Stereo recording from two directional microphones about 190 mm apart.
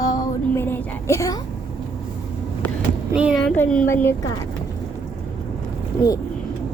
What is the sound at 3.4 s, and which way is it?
Speech, 5° left (ahead or behind).